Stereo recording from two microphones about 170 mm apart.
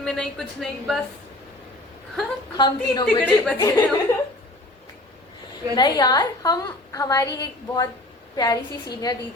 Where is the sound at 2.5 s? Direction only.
25° left (ahead or behind).